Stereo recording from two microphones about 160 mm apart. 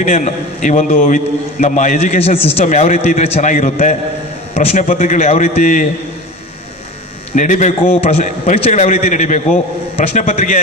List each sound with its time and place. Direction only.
0.0 s a man's voice: 50° left (ahead or behind)
7.3 s a man's voice: 50° left (ahead or behind)